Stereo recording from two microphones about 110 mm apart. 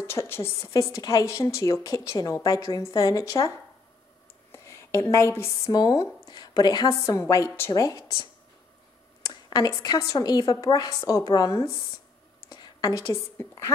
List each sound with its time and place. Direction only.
0.0 s a woman's voice: 25° left (ahead or behind)
5.7 s a woman's voice: 35° left (ahead or behind)
9.2 s a woman's voice: 40° left (ahead or behind); by 13.7 s 20° left (ahead or behind)